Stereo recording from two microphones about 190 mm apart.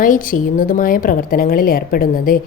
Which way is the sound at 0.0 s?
45° left (ahead or behind).